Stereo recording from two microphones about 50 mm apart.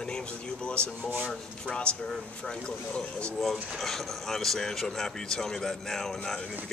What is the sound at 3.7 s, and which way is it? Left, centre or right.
Speech, centre.